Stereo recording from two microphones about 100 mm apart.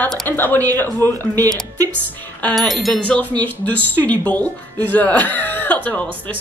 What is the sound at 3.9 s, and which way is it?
Speech, 15° left (ahead or behind).